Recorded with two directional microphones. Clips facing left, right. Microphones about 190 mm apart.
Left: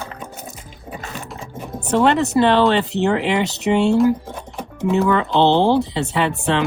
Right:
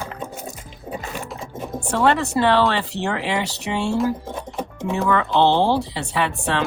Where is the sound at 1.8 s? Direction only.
20° left (ahead or behind).